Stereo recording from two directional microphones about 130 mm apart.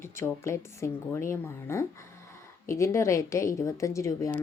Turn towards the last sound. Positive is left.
turn(degrees=25)  # may be behind; listen again after turning